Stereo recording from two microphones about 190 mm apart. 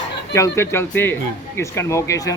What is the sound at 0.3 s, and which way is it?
Speech, 15° left (ahead or behind).